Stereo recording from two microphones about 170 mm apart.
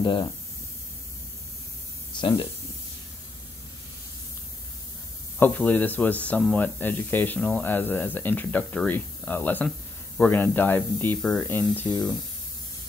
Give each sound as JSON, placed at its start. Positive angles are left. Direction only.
{"t": 0.0, "sound": "speech", "side_deg": 25}
{"t": 2.1, "sound": "speech", "side_deg": 25}
{"t": 5.4, "sound": "speech", "side_deg": 10}